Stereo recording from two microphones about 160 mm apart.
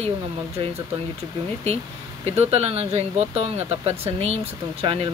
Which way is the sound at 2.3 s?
40° right (ahead or behind).